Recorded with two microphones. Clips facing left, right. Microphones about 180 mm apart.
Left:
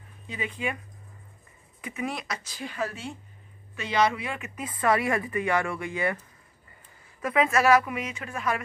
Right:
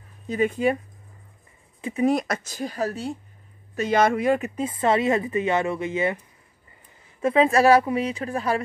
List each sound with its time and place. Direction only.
0.3 s speech: 45° right (ahead or behind)
1.8 s speech: 30° right (ahead or behind)
4.6 s speech: 25° right (ahead or behind)
7.2 s speech: 30° right (ahead or behind)